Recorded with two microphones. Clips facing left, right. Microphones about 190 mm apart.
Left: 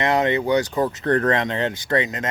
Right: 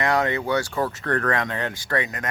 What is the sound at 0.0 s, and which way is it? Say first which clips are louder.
Speech: left 3 dB; 20° left (ahead or behind).